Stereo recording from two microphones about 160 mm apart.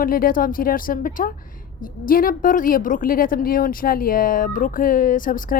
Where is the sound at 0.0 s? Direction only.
60° left (ahead or behind).